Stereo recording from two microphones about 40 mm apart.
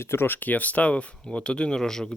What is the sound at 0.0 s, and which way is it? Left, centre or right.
Speech, left.